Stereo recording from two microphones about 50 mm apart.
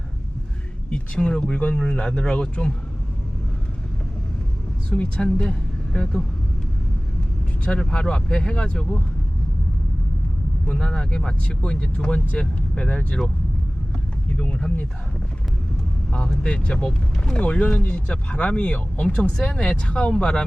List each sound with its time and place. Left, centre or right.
0.9 s speech: centre
4.9 s speech: centre
7.6 s speech: left
10.8 s speech: centre
14.3 s speech: centre
16.4 s speech: centre